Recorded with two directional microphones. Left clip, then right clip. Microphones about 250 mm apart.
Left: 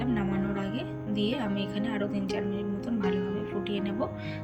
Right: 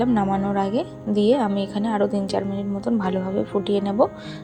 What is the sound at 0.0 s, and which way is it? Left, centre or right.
Speech, centre.